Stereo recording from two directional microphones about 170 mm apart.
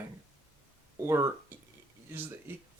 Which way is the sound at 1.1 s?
20° right (ahead or behind).